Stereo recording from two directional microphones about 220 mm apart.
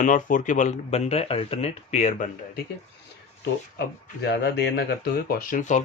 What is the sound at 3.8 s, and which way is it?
Speech, 50° left (ahead or behind).